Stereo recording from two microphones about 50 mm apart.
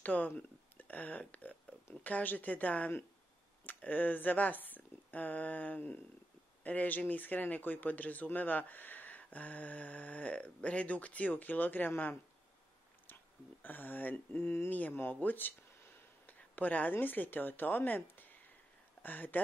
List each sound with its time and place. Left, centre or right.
0.0 s speech: left
0.4 s a sound: left
2.0 s speech: left
14.7 s speech: left